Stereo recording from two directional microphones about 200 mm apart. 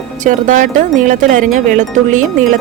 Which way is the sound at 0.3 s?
40° right (ahead or behind).